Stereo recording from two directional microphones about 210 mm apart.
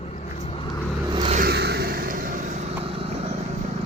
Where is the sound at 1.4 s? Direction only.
50° right (ahead or behind); by 3.3 s 30° right (ahead or behind).